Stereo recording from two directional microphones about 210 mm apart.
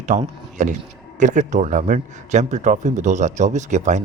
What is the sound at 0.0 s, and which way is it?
Speech, 35° right (ahead or behind).